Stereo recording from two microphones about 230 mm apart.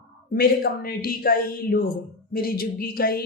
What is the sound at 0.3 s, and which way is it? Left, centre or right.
Speech, left.